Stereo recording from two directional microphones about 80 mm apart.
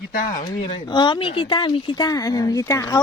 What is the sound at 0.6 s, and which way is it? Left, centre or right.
Speech, left.